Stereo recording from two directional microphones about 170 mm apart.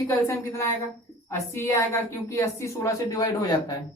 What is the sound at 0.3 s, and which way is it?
A woman's voice, 15° left (ahead or behind).